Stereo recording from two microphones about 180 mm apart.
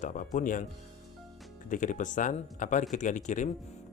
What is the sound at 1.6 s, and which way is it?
Speech, 45° left (ahead or behind).